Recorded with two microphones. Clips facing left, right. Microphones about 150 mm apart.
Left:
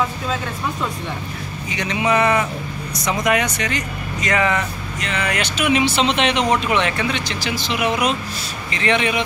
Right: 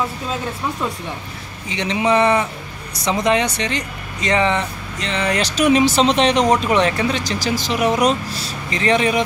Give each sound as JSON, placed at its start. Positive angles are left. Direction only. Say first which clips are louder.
{"t": 1.7, "sound": "speech", "louder": "right 2 dB", "side_deg": -25}